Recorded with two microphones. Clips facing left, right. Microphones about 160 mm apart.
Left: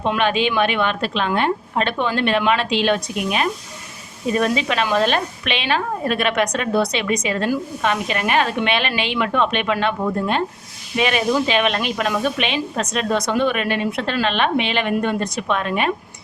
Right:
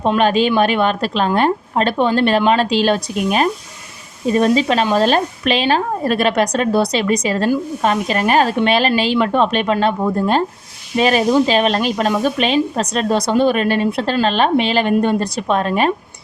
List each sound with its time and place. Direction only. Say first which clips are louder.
0.0 s a woman's voice: right 5 dB; 40° right (ahead or behind)